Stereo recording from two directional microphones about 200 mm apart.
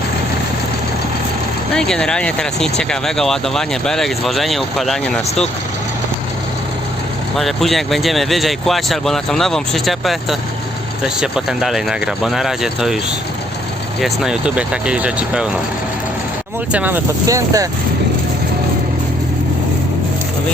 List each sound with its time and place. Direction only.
1.7 s speech: 5° left (ahead or behind)
7.3 s speech: centre (ahead or behind)
14.0 s speech: centre (ahead or behind)
16.7 s speech: 10° right (ahead or behind)